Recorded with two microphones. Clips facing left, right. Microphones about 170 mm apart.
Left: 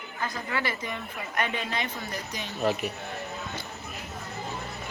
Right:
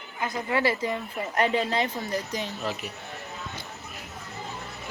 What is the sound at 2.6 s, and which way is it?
Speech, 55° left (ahead or behind).